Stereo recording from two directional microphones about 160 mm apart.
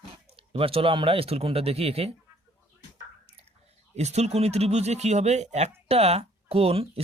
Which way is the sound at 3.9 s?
45° right (ahead or behind).